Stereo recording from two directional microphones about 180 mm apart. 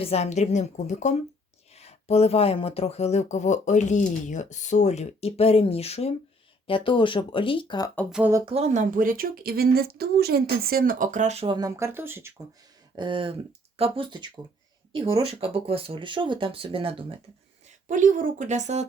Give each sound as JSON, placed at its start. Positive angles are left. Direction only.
{"t": 0.0, "sound": "speech", "side_deg": 35}
{"t": 8.1, "sound": "speech", "side_deg": -10}
{"t": 8.4, "sound": "speech", "side_deg": -35}
{"t": 11.5, "sound": "speech", "side_deg": -15}
{"t": 13.0, "sound": "speech", "side_deg": -25}
{"t": 17.8, "sound": "speech", "side_deg": -45}